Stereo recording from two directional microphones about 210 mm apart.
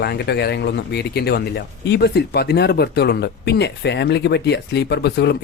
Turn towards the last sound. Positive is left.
turn(degrees=55)  # may be behind; listen again after turning